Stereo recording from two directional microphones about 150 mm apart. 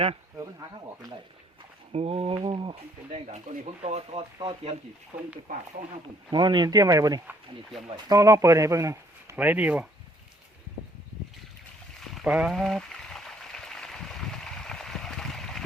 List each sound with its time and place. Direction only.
1.9 s speech: 45° right (ahead or behind)
5.5 s speech: 70° right (ahead or behind)
6.3 s speech: 30° right (ahead or behind)
9.3 s speech: 10° right (ahead or behind)
11.9 s a sound: centre (ahead or behind)